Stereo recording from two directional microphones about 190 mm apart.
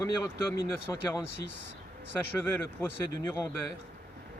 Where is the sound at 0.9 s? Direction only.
15° left (ahead or behind).